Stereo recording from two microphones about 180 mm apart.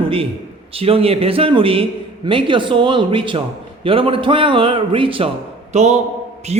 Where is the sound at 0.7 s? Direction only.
30° right (ahead or behind).